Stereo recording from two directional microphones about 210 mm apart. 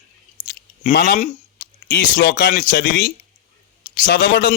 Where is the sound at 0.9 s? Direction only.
45° left (ahead or behind).